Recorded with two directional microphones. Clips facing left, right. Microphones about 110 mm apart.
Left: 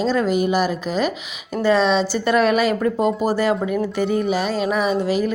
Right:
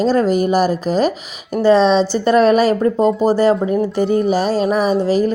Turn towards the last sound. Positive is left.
turn(degrees=-35)  # may be behind; listen again after turning